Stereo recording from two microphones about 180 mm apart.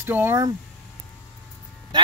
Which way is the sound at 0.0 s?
10° right (ahead or behind).